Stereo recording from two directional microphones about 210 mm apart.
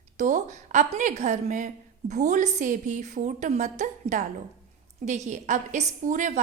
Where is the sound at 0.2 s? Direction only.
35° right (ahead or behind).